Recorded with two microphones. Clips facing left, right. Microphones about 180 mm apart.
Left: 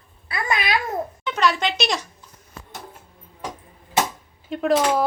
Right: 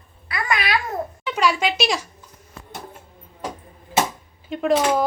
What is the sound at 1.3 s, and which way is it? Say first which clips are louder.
Speech: right 1 dB; 10° right (ahead or behind).